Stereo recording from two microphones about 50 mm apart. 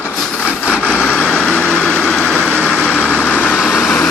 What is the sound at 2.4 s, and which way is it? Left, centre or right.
Vehicle, left.